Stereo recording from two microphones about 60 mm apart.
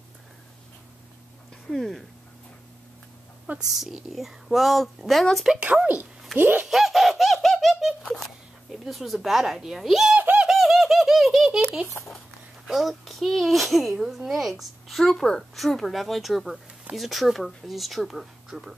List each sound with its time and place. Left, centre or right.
1.7 s speech: centre
3.5 s speech: right
3.8 s speech: centre
5.6 s speech: right
6.6 s bird: centre
8.8 s speech: centre
10.5 s bird: centre
12.6 s speech: centre